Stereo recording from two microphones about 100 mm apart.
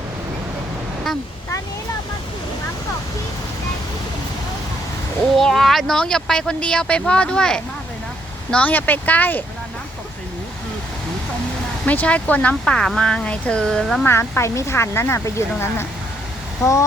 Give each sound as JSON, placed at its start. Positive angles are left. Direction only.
{"t": 5.2, "sound": "speech", "side_deg": 5}
{"t": 11.9, "sound": "speech", "side_deg": 15}
{"t": 14.0, "sound": "speech", "side_deg": 25}